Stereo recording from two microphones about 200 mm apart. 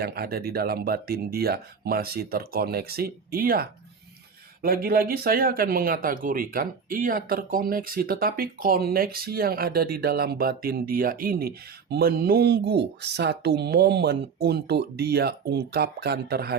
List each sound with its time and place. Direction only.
0.0 s speech: 50° right (ahead or behind)